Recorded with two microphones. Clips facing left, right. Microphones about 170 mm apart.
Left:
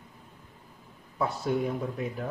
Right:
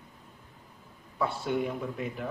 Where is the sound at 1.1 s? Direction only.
40° left (ahead or behind).